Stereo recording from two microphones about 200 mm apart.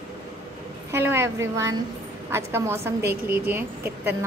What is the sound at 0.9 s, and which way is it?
A woman's voice, 10° right (ahead or behind).